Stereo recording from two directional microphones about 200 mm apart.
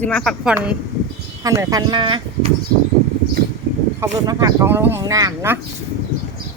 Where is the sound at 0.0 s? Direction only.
5° left (ahead or behind).